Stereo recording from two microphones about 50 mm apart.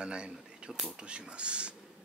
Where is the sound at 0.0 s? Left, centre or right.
Centre.